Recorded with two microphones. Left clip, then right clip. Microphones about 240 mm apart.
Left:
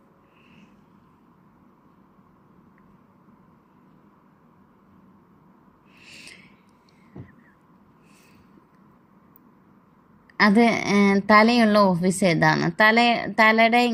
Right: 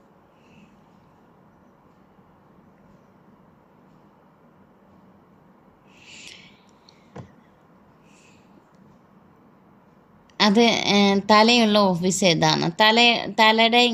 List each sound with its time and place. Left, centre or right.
6.0 s owl: centre
10.5 s speech: left